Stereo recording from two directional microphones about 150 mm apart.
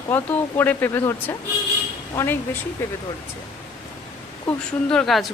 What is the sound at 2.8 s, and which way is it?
Speech, 15° left (ahead or behind).